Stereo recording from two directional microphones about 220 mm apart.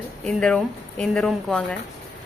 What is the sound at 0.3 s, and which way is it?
Speech, 5° left (ahead or behind).